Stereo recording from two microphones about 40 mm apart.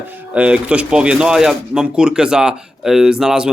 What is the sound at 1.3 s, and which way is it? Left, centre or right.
Speech, centre.